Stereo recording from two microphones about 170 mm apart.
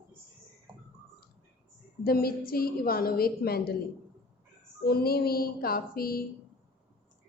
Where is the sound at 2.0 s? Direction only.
65° left (ahead or behind).